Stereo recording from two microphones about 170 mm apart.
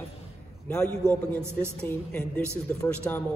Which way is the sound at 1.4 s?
15° right (ahead or behind).